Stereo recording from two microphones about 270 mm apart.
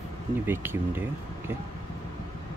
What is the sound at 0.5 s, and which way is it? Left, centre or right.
Speech, centre.